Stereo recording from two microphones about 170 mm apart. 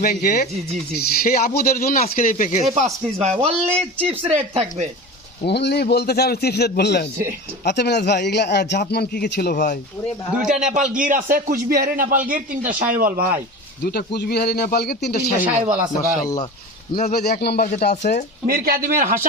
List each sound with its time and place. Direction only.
0.0 s speech: 60° left (ahead or behind)
2.7 s speech: 40° right (ahead or behind)
5.5 s a man's voice: 80° left
10.5 s a man's voice: 45° right (ahead or behind)
13.8 s a man's voice: 70° left (ahead or behind)
16.0 s speech: 20° left (ahead or behind)
16.9 s a man's voice: 55° left (ahead or behind)
18.4 s a man's voice: 60° right (ahead or behind)